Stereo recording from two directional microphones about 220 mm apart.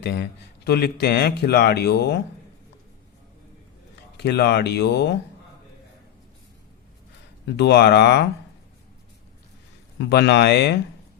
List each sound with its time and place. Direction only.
0.0 s speech: 50° left (ahead or behind)
4.2 s speech: 50° left (ahead or behind)
7.5 s speech: 50° left (ahead or behind)
10.1 s speech: 50° left (ahead or behind)